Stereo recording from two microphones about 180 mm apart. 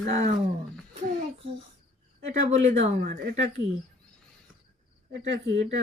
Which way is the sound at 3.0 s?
60° right (ahead or behind).